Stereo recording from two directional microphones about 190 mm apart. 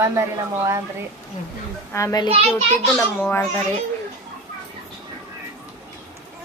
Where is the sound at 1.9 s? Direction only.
15° left (ahead or behind).